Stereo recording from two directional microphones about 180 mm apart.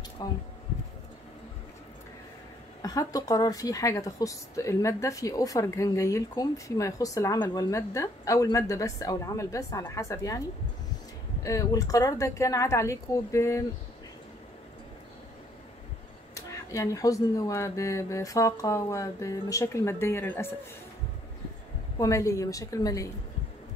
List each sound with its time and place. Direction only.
0.2 s a woman's voice: 20° left (ahead or behind)
2.8 s a woman's voice: 20° left (ahead or behind)
11.4 s speech: 20° left (ahead or behind)
16.3 s speech: 15° left (ahead or behind)
21.9 s a woman's voice: 20° left (ahead or behind)